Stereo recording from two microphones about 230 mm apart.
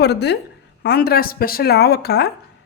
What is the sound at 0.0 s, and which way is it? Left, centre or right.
A woman's voice, left.